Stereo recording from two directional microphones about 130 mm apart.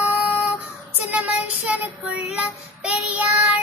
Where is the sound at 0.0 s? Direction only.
10° right (ahead or behind).